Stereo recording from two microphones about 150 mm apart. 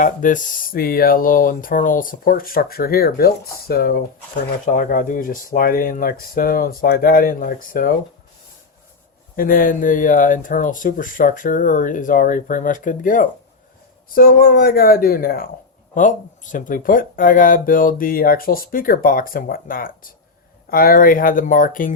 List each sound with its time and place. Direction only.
0.0 s speech: 60° left (ahead or behind); by 4.0 s 90° left
4.6 s speech: 60° left (ahead or behind)
9.3 s speech: 70° left (ahead or behind)
14.1 s speech: 75° left (ahead or behind)
16.0 s speech: 55° left (ahead or behind)